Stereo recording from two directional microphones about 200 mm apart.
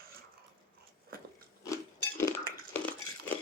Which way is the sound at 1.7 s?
15° left (ahead or behind).